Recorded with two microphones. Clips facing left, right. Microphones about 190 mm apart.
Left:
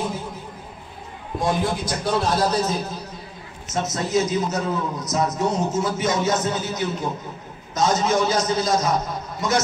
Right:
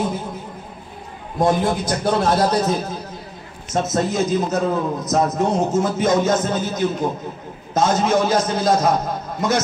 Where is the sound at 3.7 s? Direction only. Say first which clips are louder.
Right 3 dB; 50° right (ahead or behind).